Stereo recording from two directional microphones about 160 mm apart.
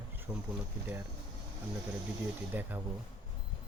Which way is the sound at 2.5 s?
10° right (ahead or behind).